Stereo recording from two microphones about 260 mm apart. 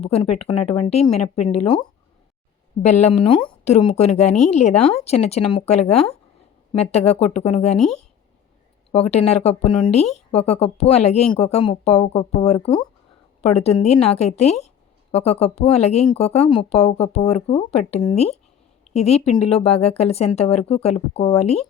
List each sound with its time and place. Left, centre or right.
0.0 s speech: left
3.2 s speech: centre
8.9 s speech: left